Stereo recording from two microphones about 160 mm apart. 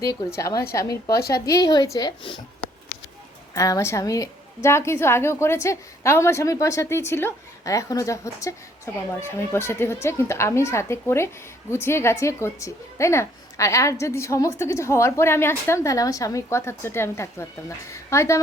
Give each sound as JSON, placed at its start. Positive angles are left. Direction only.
{"t": 0.0, "sound": "a woman's voice", "side_deg": 20}
{"t": 3.5, "sound": "a woman's voice", "side_deg": 20}